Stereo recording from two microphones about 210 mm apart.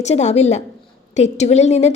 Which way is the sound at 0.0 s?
30° left (ahead or behind).